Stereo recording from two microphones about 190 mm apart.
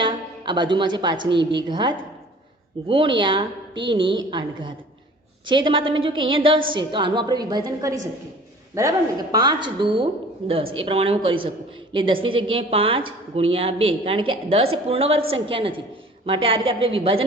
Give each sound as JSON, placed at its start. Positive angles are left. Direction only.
{"t": 0.0, "sound": "a woman's voice", "side_deg": -25}